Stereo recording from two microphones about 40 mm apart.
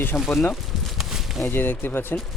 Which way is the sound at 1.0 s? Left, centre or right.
Centre.